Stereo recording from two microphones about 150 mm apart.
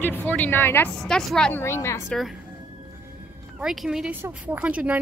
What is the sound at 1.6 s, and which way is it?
Speech, 20° left (ahead or behind).